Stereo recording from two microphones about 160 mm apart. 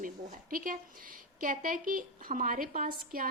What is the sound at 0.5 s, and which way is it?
A woman's voice, 65° right (ahead or behind).